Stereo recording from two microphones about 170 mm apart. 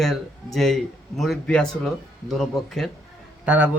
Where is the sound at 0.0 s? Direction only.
Centre (ahead or behind).